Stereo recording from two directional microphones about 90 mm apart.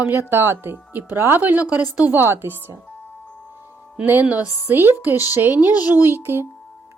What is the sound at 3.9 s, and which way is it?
A woman's voice, 15° right (ahead or behind).